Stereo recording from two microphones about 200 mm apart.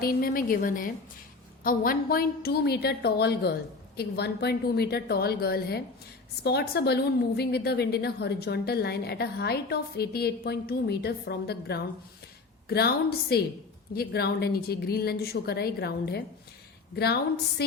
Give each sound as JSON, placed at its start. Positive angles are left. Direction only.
{"t": 0.0, "sound": "a woman's voice", "side_deg": 45}